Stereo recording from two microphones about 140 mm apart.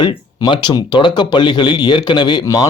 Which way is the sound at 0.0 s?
35° left (ahead or behind).